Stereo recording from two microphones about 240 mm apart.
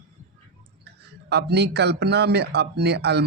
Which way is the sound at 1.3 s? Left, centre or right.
Right.